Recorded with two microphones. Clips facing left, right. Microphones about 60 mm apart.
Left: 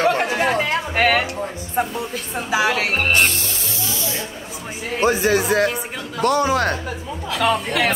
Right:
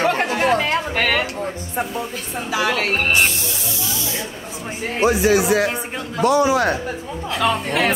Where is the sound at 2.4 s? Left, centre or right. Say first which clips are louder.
Left 1 dB; centre.